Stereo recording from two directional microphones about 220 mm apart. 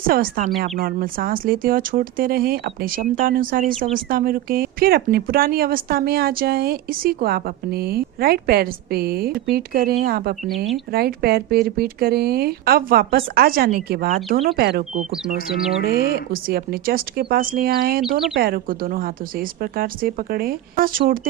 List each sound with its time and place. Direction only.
0.1 s speech: 40° right (ahead or behind)
14.3 s speech: 30° right (ahead or behind)
14.5 s speech: 45° right (ahead or behind)
15.5 s speech: 5° right (ahead or behind)
15.8 s speech: 45° right (ahead or behind)